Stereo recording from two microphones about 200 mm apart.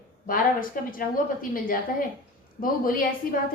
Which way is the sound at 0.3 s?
45° left (ahead or behind).